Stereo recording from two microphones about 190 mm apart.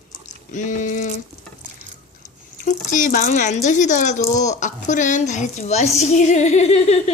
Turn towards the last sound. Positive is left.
turn(degrees=35)  # may be behind; listen again after turning